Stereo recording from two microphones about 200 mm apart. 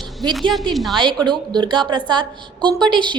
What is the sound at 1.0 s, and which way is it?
A woman's voice, 20° right (ahead or behind).